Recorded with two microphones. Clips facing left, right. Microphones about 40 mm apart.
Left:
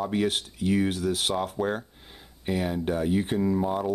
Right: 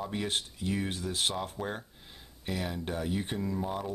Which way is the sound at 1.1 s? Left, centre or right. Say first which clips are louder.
Left 5 dB; centre.